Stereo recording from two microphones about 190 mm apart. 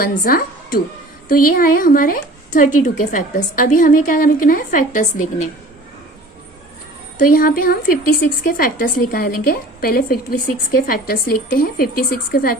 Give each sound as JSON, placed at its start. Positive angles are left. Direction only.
{"t": 0.0, "sound": "speech", "side_deg": 50}
{"t": 7.3, "sound": "speech", "side_deg": 50}